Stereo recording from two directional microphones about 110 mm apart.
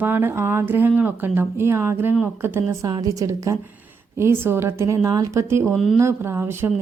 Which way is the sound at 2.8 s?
35° right (ahead or behind).